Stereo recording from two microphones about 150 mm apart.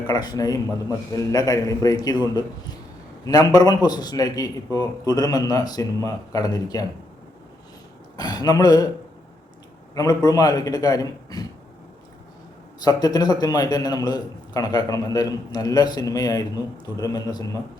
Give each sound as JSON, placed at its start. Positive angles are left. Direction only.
{"t": 0.1, "sound": "a man's voice", "side_deg": 25}
{"t": 3.2, "sound": "a man's voice", "side_deg": 25}
{"t": 8.1, "sound": "a man's voice", "side_deg": 25}
{"t": 9.9, "sound": "a man's voice", "side_deg": 25}
{"t": 12.8, "sound": "a man's voice", "side_deg": 25}